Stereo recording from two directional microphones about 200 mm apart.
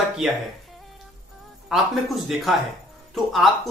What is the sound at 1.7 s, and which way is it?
Speech, centre (ahead or behind).